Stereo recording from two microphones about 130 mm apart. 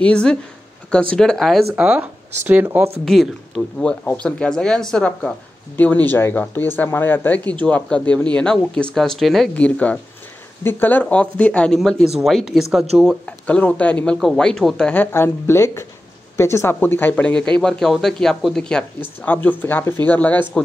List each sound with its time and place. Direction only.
0.0 s speech: 5° left (ahead or behind); by 2.9 s 15° right (ahead or behind)
3.1 s speech: 5° left (ahead or behind)
13.2 s speech: 10° left (ahead or behind)